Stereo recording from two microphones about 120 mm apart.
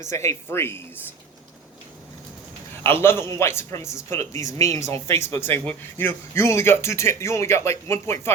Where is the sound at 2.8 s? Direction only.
20° left (ahead or behind).